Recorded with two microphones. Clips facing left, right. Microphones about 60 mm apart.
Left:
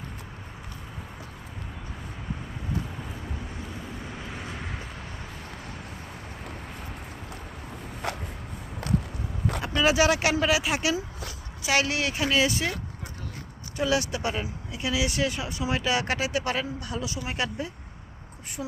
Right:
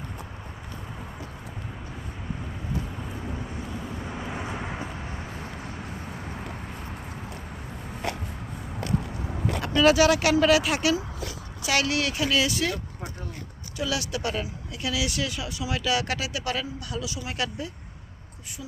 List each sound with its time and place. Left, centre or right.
3.0 s vehicle: centre
4.2 s vehicle: centre
9.6 s speech: centre
13.7 s speech: left